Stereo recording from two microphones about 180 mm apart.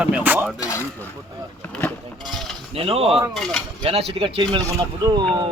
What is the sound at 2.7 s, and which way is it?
Speech, 30° right (ahead or behind).